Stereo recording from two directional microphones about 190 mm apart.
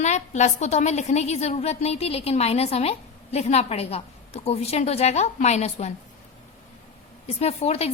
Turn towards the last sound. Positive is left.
turn(degrees=35)  # may be behind; listen again after turning